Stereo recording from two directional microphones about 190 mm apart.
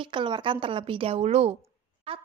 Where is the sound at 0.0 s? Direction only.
25° right (ahead or behind).